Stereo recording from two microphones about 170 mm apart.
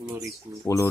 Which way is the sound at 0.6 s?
20° left (ahead or behind).